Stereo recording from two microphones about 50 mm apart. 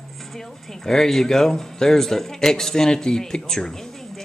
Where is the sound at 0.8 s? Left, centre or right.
Centre.